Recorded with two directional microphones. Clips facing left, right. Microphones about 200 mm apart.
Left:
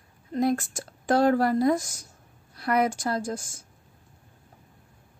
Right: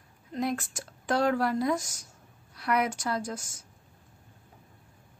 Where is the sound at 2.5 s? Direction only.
35° left (ahead or behind).